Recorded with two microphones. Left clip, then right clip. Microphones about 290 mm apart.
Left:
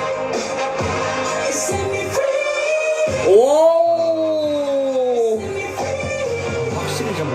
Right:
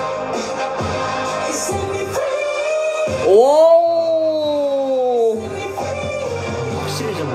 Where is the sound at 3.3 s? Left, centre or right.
Centre.